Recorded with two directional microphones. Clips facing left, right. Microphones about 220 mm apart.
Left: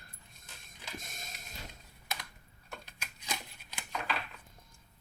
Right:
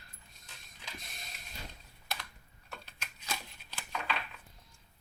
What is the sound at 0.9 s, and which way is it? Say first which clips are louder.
Printer: left 6 dB; 45° left (ahead or behind).